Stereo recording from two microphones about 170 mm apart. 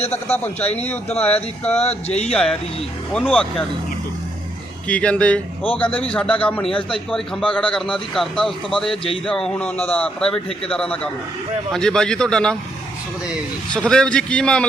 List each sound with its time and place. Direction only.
1.2 s a sound: 10° left (ahead or behind)
1.8 s speech: 40° left (ahead or behind)
2.3 s a man's voice: 5° left (ahead or behind)
4.9 s a sound: 5° left (ahead or behind)
6.1 s a man's voice: 5° left (ahead or behind)
13.7 s a man's voice: 5° left (ahead or behind)